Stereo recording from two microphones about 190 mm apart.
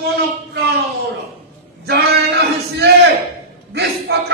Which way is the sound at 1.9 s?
60° right (ahead or behind).